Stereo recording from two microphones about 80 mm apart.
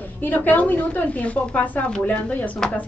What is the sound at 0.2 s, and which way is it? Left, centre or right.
A woman's voice, left.